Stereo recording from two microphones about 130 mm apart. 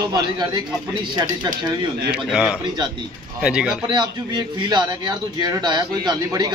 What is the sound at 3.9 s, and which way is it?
A man's voice, 35° right (ahead or behind).